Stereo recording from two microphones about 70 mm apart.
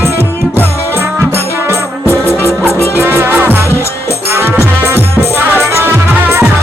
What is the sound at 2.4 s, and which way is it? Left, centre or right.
Music, left.